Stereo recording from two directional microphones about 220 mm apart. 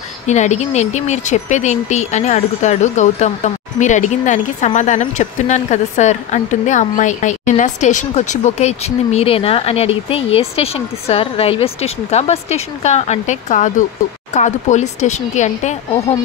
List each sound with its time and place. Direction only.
0.3 s speech: 30° left (ahead or behind)